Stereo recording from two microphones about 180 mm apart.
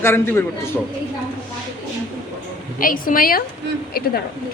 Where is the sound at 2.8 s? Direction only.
50° left (ahead or behind).